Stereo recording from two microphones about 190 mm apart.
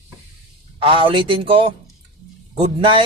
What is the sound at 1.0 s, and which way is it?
A man's voice, 30° right (ahead or behind).